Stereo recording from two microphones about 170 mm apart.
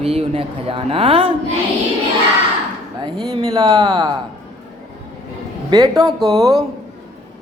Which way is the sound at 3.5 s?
25° right (ahead or behind).